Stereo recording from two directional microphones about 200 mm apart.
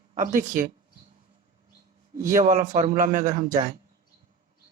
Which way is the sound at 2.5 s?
40° right (ahead or behind).